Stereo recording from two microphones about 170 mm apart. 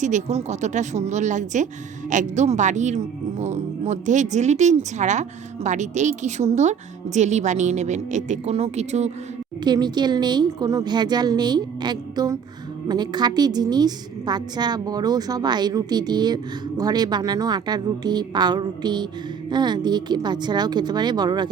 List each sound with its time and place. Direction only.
0.0 s a woman's voice: 45° right (ahead or behind)
9.6 s a woman's voice: 25° right (ahead or behind)